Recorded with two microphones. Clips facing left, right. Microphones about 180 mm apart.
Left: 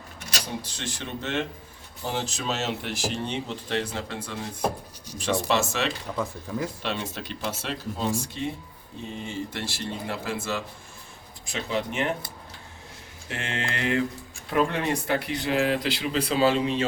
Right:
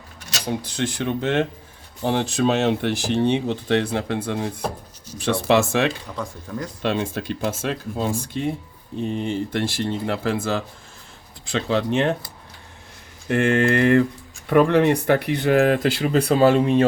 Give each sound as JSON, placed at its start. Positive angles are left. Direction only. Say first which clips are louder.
{"t": 0.4, "sound": "speech", "louder": "right 13 dB", "side_deg": -60}
{"t": 6.1, "sound": "speech", "louder": "even", "side_deg": 5}
{"t": 6.8, "sound": "speech", "louder": "right 8 dB", "side_deg": -50}
{"t": 11.5, "sound": "speech", "louder": "right 8 dB", "side_deg": -85}
{"t": 13.2, "sound": "speech", "louder": "right 14 dB", "side_deg": -55}